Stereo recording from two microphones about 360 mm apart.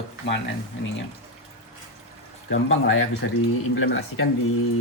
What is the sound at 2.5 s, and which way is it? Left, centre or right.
Speech, left.